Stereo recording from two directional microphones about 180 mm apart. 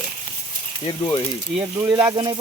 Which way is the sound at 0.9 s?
25° left (ahead or behind).